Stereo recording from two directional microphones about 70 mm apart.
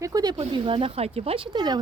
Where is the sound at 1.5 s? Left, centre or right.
Right.